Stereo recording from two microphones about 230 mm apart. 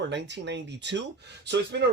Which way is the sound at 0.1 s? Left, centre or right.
Right.